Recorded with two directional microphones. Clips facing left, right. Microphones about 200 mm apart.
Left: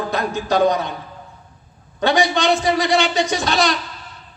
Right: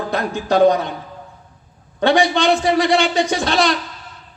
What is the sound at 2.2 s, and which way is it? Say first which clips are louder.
A man's voice: right 2 dB; 55° right (ahead or behind).